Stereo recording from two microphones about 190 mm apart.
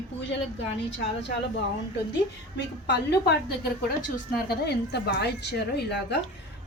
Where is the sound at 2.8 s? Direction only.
60° left (ahead or behind).